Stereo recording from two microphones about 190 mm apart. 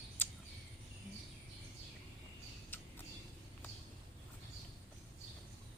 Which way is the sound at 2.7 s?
10° left (ahead or behind).